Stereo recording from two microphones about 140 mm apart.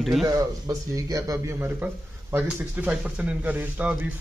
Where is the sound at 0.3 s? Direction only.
25° right (ahead or behind).